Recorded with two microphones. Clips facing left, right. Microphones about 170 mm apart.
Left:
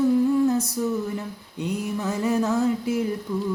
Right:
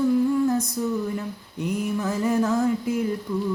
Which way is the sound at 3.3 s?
Centre (ahead or behind).